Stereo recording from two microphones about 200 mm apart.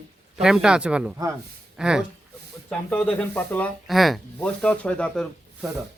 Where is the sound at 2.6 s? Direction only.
5° left (ahead or behind).